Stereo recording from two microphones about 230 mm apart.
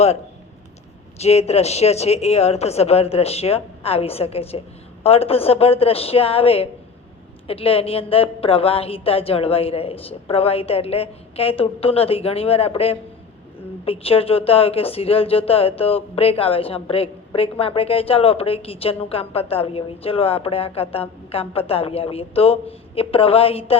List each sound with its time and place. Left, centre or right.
1.2 s a woman's voice: left